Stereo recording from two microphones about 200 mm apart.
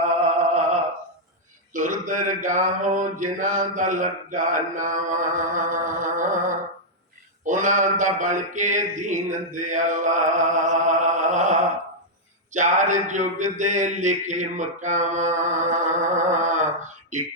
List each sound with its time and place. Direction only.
0.0 s a sound: 35° right (ahead or behind)
1.7 s mantra: 40° right (ahead or behind)
7.4 s mantra: 40° right (ahead or behind)
12.5 s mantra: 40° right (ahead or behind)